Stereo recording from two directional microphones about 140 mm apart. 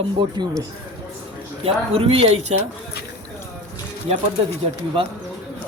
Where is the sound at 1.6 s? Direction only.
40° right (ahead or behind).